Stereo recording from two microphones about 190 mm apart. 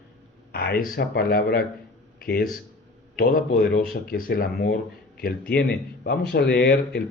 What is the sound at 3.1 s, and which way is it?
Speech, 50° left (ahead or behind).